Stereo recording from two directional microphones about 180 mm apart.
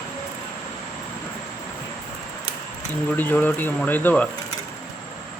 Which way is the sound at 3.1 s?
10° left (ahead or behind).